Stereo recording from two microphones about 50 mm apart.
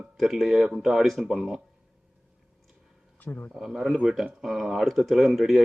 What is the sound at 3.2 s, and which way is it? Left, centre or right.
Speech, left.